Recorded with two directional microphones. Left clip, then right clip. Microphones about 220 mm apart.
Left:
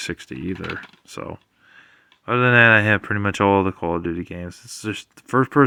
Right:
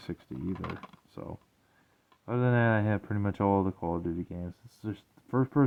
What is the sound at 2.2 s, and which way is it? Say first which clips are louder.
Speech: left 14 dB; 10° left (ahead or behind).